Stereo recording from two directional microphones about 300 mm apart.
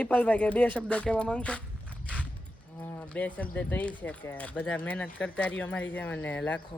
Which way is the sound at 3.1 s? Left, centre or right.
Centre.